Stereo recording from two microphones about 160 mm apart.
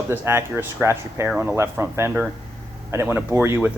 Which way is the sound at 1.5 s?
15° right (ahead or behind).